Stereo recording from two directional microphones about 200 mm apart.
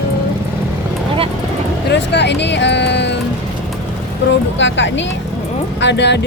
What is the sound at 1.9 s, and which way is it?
Speech, 60° left (ahead or behind).